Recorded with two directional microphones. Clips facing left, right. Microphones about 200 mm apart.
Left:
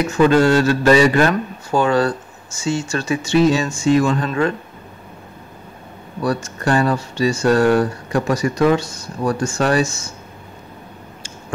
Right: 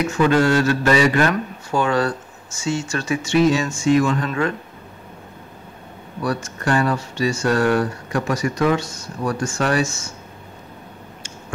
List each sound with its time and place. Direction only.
0.2 s speech: 30° left (ahead or behind)
6.2 s speech: 35° left (ahead or behind)